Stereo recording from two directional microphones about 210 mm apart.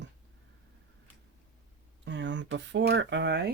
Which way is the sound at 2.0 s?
60° right (ahead or behind).